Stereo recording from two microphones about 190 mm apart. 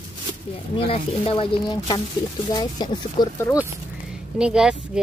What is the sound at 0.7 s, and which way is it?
Speech, 30° left (ahead or behind).